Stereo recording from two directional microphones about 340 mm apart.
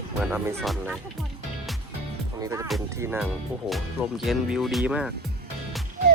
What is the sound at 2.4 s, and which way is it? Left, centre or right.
Speech, centre.